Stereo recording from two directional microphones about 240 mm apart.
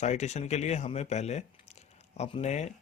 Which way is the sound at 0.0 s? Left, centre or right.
Left.